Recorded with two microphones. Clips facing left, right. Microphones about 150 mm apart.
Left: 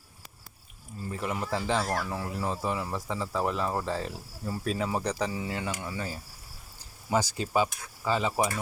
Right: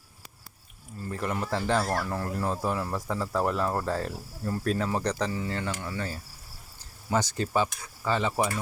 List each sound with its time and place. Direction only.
1.1 s speech: 5° left (ahead or behind)
7.3 s speech: 10° left (ahead or behind)
8.4 s speech: 15° left (ahead or behind)